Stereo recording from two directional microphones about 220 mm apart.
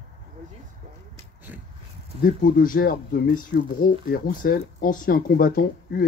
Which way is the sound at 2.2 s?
40° left (ahead or behind).